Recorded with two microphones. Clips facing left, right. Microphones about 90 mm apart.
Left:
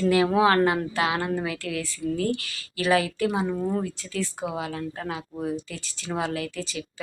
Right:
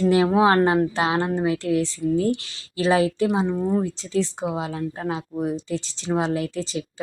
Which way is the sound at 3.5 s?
15° right (ahead or behind).